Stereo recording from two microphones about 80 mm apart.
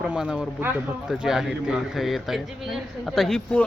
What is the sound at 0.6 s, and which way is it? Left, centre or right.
Speech, right.